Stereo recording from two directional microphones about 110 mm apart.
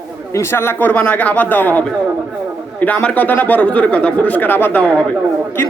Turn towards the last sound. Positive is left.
turn(degrees=15)  # may be behind; listen again after turning